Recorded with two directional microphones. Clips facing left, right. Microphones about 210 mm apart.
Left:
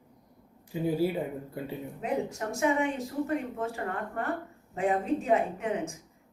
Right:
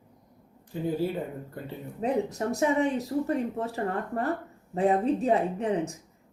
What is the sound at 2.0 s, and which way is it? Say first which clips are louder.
Speech: right 5 dB; 35° right (ahead or behind).